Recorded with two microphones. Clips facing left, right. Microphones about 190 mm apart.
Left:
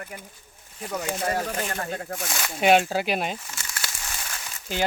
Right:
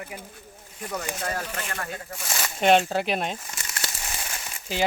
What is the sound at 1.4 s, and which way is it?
Speech, 25° left (ahead or behind).